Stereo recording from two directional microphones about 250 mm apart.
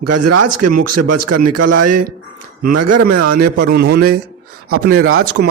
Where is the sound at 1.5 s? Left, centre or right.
Right.